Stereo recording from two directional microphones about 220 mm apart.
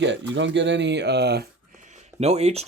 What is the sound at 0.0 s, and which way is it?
Speech, 55° right (ahead or behind).